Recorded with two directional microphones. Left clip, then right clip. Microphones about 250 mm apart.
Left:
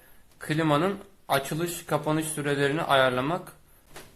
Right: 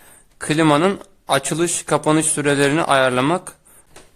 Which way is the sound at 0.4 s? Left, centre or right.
Right.